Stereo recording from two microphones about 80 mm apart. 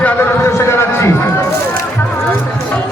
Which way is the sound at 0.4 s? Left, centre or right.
Left.